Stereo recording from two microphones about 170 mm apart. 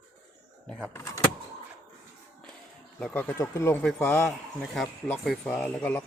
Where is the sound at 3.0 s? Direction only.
10° left (ahead or behind).